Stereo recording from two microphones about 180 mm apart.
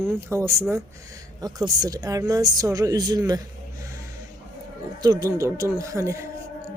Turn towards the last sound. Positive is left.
turn(degrees=-15)  # may be behind; listen again after turning